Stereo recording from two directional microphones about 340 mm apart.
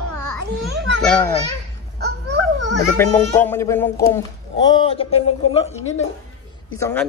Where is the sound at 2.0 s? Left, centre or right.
Right.